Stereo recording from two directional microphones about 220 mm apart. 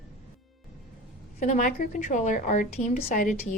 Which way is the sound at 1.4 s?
35° left (ahead or behind).